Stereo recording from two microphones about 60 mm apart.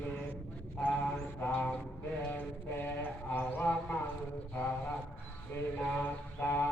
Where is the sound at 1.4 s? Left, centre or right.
Left.